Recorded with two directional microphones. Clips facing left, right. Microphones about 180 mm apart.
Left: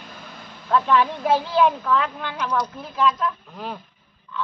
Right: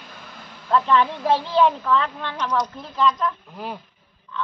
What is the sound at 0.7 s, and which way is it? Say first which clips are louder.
Speech: even; 5° left (ahead or behind).